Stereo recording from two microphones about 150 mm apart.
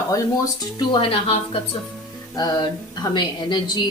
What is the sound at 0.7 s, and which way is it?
Speech, 35° left (ahead or behind).